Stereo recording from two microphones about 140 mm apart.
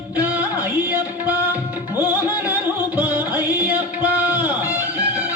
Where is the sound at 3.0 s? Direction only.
10° right (ahead or behind).